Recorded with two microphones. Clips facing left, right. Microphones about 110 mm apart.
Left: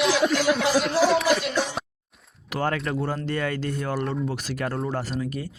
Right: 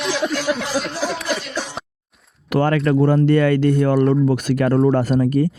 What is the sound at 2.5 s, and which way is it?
Speech, 70° right (ahead or behind).